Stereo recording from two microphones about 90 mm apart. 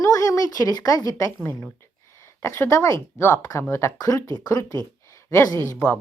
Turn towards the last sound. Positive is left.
turn(degrees=40)  # may be behind; listen again after turning